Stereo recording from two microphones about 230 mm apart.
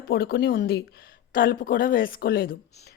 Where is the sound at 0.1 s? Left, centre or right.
Left.